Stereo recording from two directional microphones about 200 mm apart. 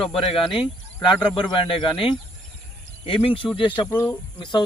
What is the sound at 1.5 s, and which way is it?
Speech, 25° left (ahead or behind).